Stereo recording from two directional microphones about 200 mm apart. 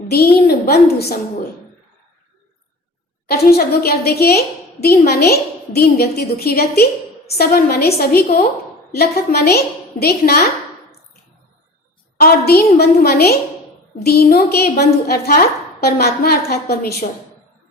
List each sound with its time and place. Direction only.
0.1 s a woman's voice: 50° left (ahead or behind)
3.2 s a woman's voice: 50° left (ahead or behind)
12.1 s a woman's voice: 50° left (ahead or behind)